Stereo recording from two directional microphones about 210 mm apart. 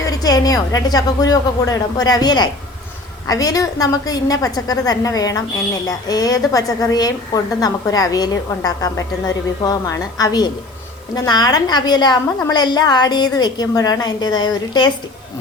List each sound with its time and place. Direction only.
0.0 s a woman's voice: 15° left (ahead or behind)